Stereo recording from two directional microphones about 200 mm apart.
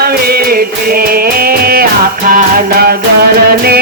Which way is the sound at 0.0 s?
50° right (ahead or behind).